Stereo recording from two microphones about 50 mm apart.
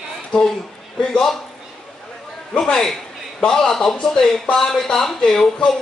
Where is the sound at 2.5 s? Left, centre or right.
Centre.